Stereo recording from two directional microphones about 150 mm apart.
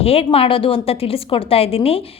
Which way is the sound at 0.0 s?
40° left (ahead or behind).